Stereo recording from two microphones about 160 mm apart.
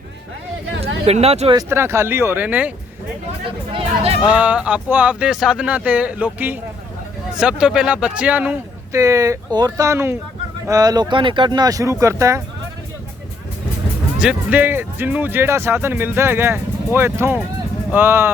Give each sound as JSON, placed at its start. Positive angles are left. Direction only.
{"t": 0.8, "sound": "speech", "side_deg": -40}
{"t": 1.5, "sound": "speech", "side_deg": -15}
{"t": 3.7, "sound": "a sound", "side_deg": -35}
{"t": 4.2, "sound": "speech", "side_deg": -5}
{"t": 9.0, "sound": "speech", "side_deg": -20}
{"t": 14.2, "sound": "speech", "side_deg": -10}